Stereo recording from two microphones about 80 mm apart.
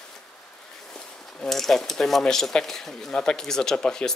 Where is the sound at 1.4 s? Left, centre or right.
Centre.